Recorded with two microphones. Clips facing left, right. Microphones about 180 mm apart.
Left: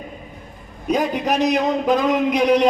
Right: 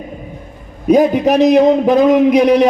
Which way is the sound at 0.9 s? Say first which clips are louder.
Right 9 dB; 50° right (ahead or behind).